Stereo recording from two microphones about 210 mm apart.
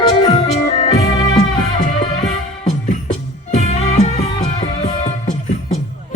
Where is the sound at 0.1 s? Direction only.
20° left (ahead or behind).